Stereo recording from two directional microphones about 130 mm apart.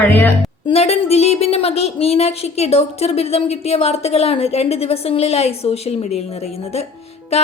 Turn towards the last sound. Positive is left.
turn(degrees=55)  # may be behind; listen again after turning